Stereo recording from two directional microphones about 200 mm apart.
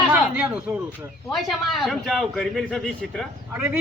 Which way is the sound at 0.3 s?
5° right (ahead or behind).